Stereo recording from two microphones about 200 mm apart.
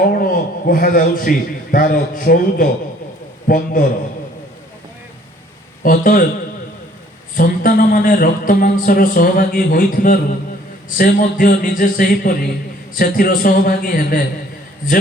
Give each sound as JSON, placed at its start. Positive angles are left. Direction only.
{"t": 0.1, "sound": "a man's voice", "side_deg": 45}
{"t": 5.8, "sound": "a man's voice", "side_deg": 45}
{"t": 7.3, "sound": "a man's voice", "side_deg": 45}